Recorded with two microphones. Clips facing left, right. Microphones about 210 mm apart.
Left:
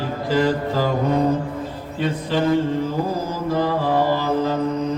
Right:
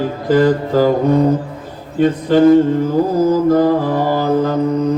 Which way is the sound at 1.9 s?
50° right (ahead or behind).